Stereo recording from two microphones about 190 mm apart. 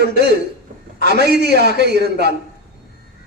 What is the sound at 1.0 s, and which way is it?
Speech, 60° right (ahead or behind).